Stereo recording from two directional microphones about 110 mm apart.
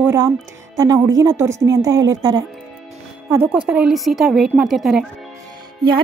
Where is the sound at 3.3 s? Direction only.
20° right (ahead or behind).